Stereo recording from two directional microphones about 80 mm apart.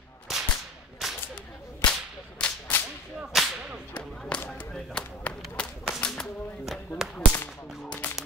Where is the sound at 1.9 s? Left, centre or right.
Centre.